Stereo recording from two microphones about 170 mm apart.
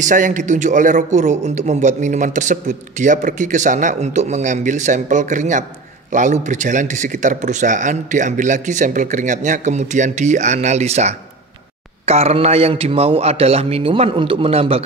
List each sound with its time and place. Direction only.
0.0 s a man's voice: 50° right (ahead or behind)